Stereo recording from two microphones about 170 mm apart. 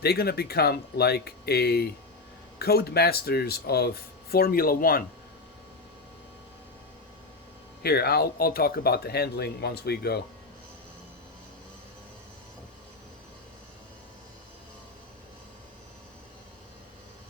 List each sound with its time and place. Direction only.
0.0 s speech: 70° left (ahead or behind)
7.8 s speech: 70° left (ahead or behind)